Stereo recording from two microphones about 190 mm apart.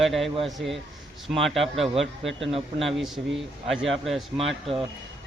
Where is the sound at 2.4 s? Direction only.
30° right (ahead or behind).